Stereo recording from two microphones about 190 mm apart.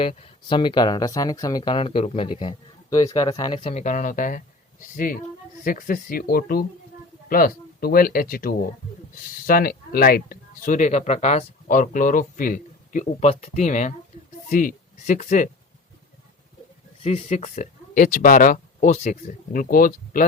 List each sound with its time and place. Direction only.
0.0 s speech: 30° left (ahead or behind)
17.0 s speech: 35° left (ahead or behind)
19.5 s speech: 45° left (ahead or behind)